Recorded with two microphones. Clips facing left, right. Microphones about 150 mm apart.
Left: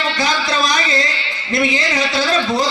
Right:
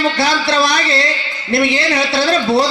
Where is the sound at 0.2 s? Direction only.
70° right (ahead or behind).